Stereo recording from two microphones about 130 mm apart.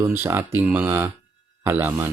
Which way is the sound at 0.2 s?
15° right (ahead or behind).